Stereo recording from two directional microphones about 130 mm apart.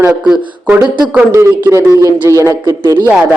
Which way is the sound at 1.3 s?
20° right (ahead or behind).